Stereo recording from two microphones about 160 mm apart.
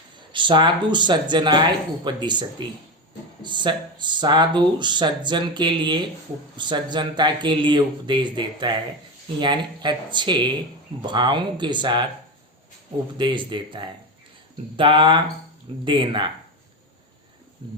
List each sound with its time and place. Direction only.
0.3 s speech: 30° right (ahead or behind)
13.1 s speech: 30° right (ahead or behind)